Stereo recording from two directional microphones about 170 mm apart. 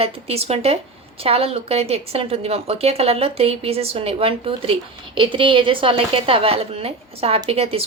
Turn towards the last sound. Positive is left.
turn(degrees=-35)  # may be behind; listen again after turning